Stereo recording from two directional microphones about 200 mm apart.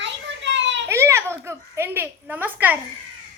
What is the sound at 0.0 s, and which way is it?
Children playing, 65° right (ahead or behind).